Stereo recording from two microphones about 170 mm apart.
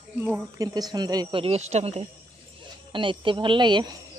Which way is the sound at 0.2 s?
20° right (ahead or behind).